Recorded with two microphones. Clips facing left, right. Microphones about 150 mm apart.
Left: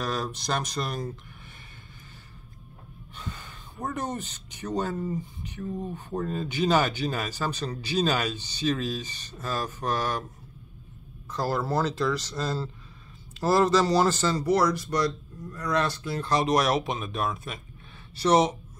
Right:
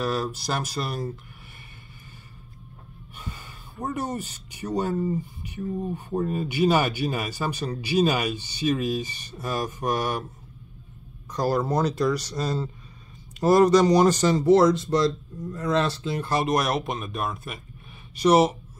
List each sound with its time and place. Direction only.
0.0 s speech: 5° right (ahead or behind)
3.2 s speech: 10° right (ahead or behind)
11.3 s speech: 15° right (ahead or behind)
16.2 s speech: 5° right (ahead or behind)
18.1 s speech: 10° right (ahead or behind)